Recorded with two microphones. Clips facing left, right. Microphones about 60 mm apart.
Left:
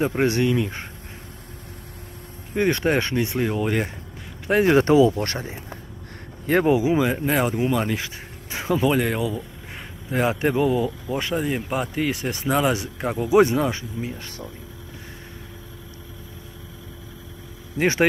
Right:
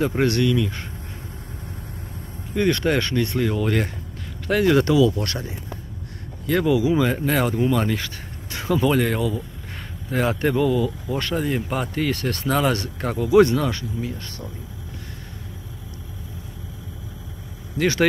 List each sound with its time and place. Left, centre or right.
0.2 s speech: left
2.5 s speech: left
4.5 s speech: left
7.0 s speech: centre
13.1 s speech: centre
17.7 s speech: left